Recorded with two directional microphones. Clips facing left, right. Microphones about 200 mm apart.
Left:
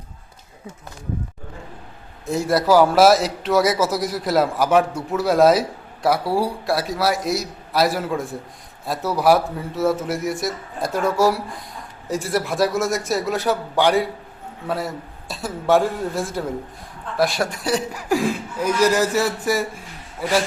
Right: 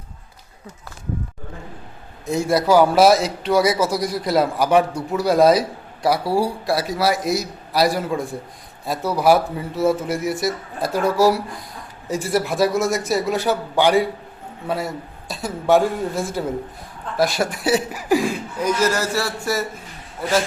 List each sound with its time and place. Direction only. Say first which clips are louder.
2.2 s a man's voice: right 1 dB; centre (ahead or behind)
18.8 s speech: left 6 dB; 15° left (ahead or behind)